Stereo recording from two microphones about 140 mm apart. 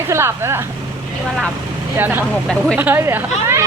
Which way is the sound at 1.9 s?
15° right (ahead or behind).